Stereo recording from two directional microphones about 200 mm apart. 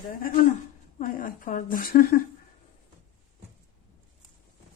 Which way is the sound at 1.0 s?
45° left (ahead or behind).